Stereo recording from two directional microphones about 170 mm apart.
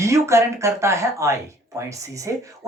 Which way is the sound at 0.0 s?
15° right (ahead or behind).